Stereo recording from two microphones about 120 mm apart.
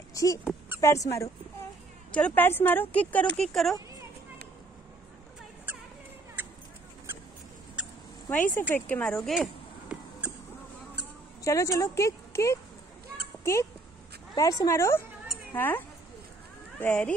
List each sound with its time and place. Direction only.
0.1 s speech: 30° left (ahead or behind)
2.1 s speech: 15° left (ahead or behind)
6.4 s a sound: 15° right (ahead or behind)
8.3 s speech: 15° left (ahead or behind)
9.3 s cat: 5° right (ahead or behind)
11.4 s speech: 25° left (ahead or behind)
13.4 s cat: 25° left (ahead or behind)
14.3 s speech: 30° left (ahead or behind)
16.8 s speech: 10° left (ahead or behind)